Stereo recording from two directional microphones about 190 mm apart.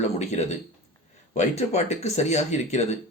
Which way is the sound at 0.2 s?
35° left (ahead or behind).